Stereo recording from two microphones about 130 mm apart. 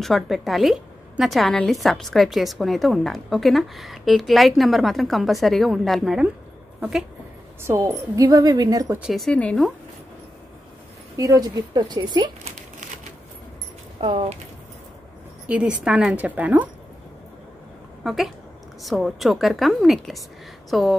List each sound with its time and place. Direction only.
0.0 s a woman's voice: centre (ahead or behind)
7.6 s speech: 25° right (ahead or behind)
9.0 s a woman's voice: centre (ahead or behind)
11.1 s speech: 25° right (ahead or behind)
14.0 s speech: 40° right (ahead or behind)
15.4 s a woman's voice: 10° right (ahead or behind)
18.0 s a woman's voice: centre (ahead or behind)